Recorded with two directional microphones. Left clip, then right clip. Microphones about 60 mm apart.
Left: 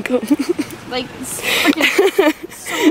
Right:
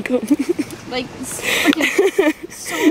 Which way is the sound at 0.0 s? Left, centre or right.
Centre.